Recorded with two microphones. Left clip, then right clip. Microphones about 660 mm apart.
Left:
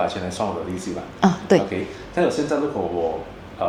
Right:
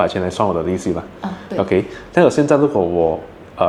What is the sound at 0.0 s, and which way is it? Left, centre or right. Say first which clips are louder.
Speech: right 7 dB; right.